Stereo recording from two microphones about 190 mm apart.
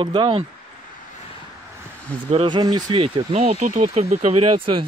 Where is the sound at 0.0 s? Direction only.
25° right (ahead or behind).